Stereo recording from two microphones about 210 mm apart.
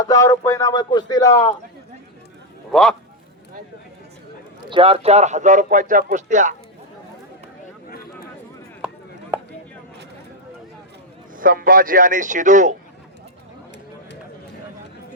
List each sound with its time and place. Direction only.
0.0 s speech: 15° left (ahead or behind)
2.7 s speech: centre (ahead or behind)
4.7 s speech: 25° right (ahead or behind)
9.3 s a sound: 10° right (ahead or behind)
11.3 s speech: 40° right (ahead or behind)